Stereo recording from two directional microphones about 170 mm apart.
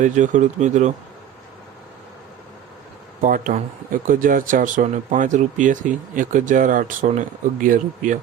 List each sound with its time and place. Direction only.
0.0 s speech: 45° right (ahead or behind)
3.2 s speech: 55° right (ahead or behind)